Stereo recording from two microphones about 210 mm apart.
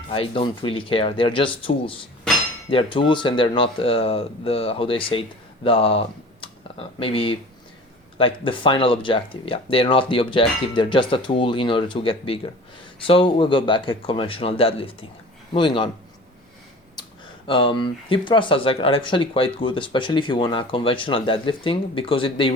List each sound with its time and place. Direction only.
0.1 s speech: 25° left (ahead or behind)
2.6 s speech: 25° left (ahead or behind)
17.0 s speech: 25° left (ahead or behind)